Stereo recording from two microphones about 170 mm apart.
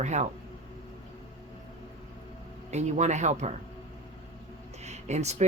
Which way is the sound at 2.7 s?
40° right (ahead or behind).